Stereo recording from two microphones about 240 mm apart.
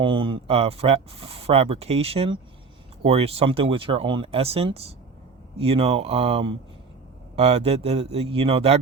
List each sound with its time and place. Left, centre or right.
0.0 s speech: right